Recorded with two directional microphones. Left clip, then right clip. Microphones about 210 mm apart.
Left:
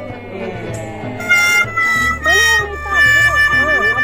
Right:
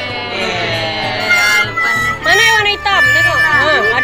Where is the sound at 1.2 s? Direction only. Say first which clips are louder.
Even; centre (ahead or behind).